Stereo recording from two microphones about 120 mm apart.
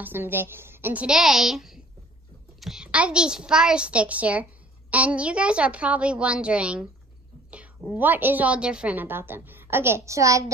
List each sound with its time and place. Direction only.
0.0 s a woman's voice: 20° right (ahead or behind)
1.0 s a woman's voice: 5° right (ahead or behind); by 10.4 s 25° right (ahead or behind)